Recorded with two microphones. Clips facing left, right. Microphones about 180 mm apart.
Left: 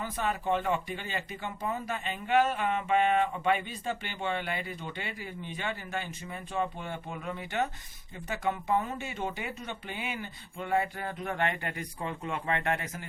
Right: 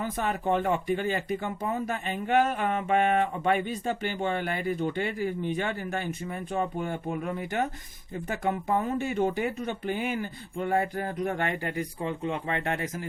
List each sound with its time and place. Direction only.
0.0 s speech: 50° right (ahead or behind)